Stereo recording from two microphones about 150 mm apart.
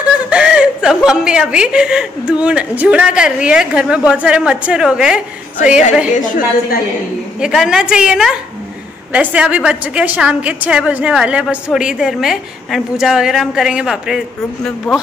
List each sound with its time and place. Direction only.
0.3 s a woman's voice: 5° right (ahead or behind)
6.0 s a woman's voice: 60° left (ahead or behind)
7.3 s a woman's voice: 5° right (ahead or behind)